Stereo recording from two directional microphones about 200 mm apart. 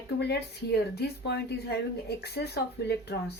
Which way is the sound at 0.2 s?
55° left (ahead or behind).